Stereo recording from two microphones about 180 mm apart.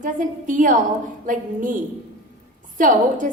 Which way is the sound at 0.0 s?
45° right (ahead or behind).